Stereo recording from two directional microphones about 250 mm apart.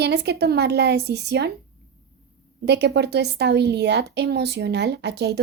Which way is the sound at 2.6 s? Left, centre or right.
Right.